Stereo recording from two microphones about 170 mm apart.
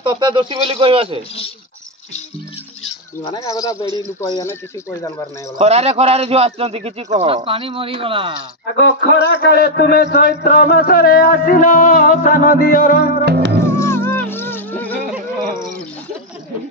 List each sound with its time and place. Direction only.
0.0 s speech: 25° right (ahead or behind)
3.3 s a man's voice: 20° left (ahead or behind)
5.6 s a man's voice: 40° right (ahead or behind)
8.7 s a man's voice: 85° left; by 13.0 s 55° left (ahead or behind)
13.2 s music: 75° right (ahead or behind)
13.7 s music: 15° left (ahead or behind)